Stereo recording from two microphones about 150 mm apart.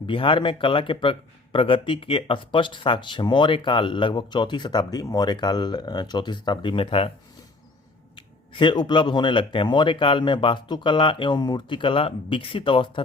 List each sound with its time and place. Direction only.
0.1 s speech: 35° left (ahead or behind)
8.1 s speech: 35° left (ahead or behind)